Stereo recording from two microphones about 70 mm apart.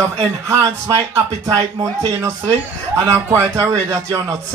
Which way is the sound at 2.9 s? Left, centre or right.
Right.